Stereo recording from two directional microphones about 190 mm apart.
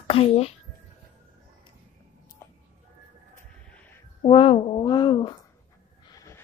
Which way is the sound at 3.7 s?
10° left (ahead or behind).